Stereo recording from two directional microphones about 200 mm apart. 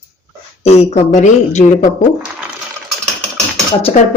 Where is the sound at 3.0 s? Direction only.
5° left (ahead or behind).